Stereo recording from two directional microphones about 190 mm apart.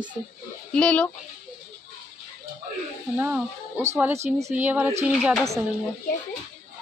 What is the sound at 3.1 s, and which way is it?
Speech, 10° right (ahead or behind).